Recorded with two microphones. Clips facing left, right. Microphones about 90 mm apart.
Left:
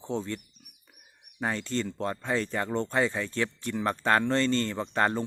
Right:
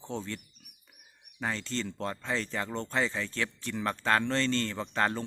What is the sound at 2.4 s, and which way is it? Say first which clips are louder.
Speech: left 4 dB; 35° left (ahead or behind).